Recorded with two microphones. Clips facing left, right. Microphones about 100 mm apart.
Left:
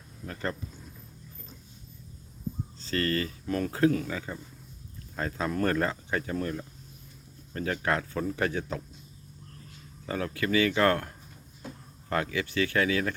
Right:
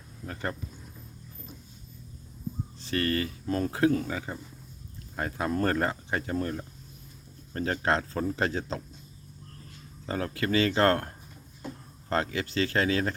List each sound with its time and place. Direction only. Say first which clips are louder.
2.8 s speech: even; 20° right (ahead or behind)
10.1 s speech: even; 30° right (ahead or behind)
12.0 s speech: right 1 dB; 30° right (ahead or behind)